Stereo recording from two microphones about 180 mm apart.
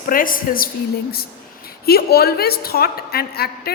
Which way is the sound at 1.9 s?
60° left (ahead or behind).